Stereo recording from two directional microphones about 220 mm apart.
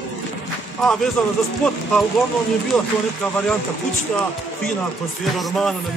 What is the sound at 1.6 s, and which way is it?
Speech, 5° left (ahead or behind).